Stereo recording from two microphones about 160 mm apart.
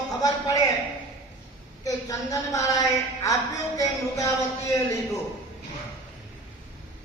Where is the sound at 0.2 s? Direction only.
20° left (ahead or behind).